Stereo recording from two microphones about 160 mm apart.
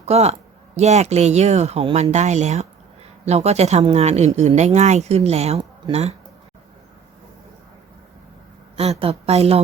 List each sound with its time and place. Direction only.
0.0 s speech: 40° right (ahead or behind)
8.7 s a woman's voice: 40° right (ahead or behind)